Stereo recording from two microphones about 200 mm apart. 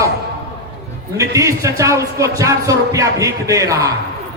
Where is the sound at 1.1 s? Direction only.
15° right (ahead or behind).